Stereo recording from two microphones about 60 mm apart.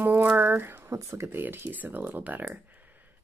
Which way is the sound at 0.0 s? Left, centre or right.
Right.